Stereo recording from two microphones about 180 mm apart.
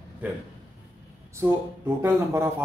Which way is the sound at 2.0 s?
15° right (ahead or behind).